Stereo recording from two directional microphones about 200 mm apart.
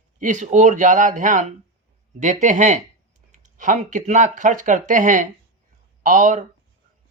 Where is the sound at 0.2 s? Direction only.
40° right (ahead or behind).